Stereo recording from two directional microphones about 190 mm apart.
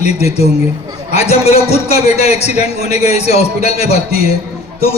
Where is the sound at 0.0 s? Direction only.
35° left (ahead or behind).